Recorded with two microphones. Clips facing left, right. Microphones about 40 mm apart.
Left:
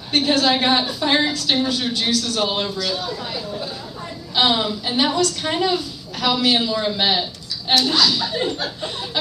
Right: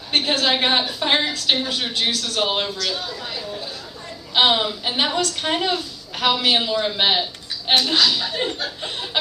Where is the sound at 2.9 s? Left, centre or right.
Centre.